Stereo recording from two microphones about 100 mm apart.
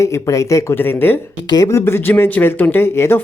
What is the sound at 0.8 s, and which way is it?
Speech, 20° left (ahead or behind).